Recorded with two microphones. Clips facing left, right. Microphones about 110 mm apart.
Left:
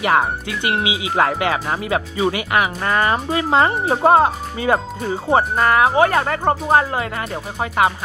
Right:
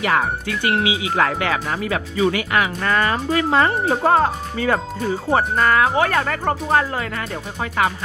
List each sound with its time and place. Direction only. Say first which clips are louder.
0.0 s speech: left 2 dB; 25° left (ahead or behind)